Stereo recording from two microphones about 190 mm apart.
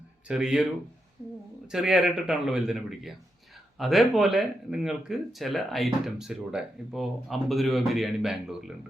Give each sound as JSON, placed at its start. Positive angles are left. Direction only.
{"t": 0.3, "sound": "speech", "side_deg": -5}